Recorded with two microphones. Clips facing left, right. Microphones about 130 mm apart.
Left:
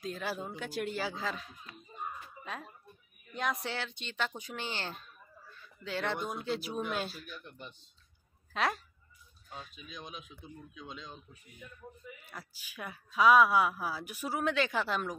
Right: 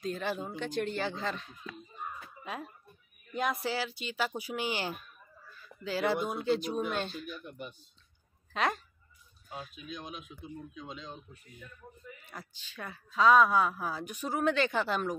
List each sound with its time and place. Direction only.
0.0 s speech: centre (ahead or behind)
7.2 s a woman's voice: 5° right (ahead or behind)